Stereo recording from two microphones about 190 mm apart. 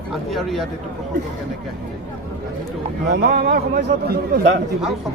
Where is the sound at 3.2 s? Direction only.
55° right (ahead or behind).